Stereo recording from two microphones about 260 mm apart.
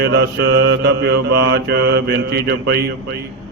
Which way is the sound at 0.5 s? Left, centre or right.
Right.